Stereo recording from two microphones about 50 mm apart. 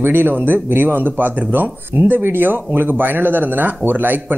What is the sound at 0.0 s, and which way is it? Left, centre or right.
Speech, right.